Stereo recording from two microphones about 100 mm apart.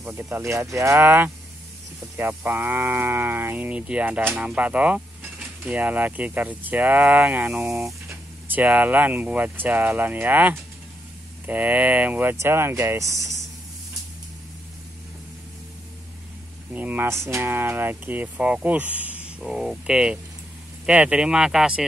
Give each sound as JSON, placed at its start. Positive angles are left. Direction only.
{"t": 0.2, "sound": "speech", "side_deg": -25}
{"t": 16.7, "sound": "speech", "side_deg": -20}